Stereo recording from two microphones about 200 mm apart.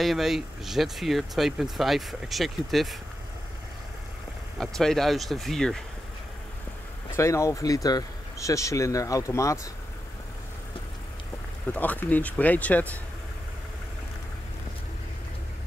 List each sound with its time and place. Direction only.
0.0 s speech: centre (ahead or behind)
4.6 s speech: centre (ahead or behind)
7.2 s speech: 15° left (ahead or behind)
11.7 s speech: 10° left (ahead or behind)